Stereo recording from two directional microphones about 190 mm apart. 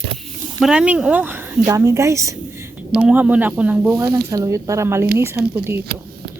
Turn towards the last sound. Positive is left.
turn(degrees=-10)  # may be behind; listen again after turning